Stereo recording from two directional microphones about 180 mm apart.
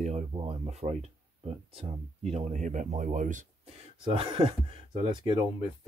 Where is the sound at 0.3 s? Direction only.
30° right (ahead or behind).